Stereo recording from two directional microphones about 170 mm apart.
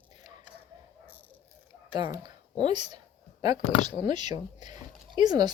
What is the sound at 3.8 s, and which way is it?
A woman's voice, 25° right (ahead or behind).